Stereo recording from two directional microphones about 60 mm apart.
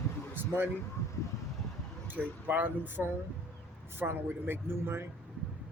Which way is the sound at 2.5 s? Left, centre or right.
Right.